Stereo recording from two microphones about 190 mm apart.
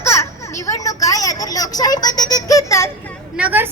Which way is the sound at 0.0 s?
15° left (ahead or behind).